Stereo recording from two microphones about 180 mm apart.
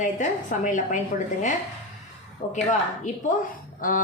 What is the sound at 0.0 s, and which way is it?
Speech, 45° left (ahead or behind).